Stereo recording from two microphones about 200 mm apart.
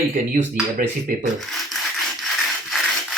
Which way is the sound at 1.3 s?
Centre (ahead or behind).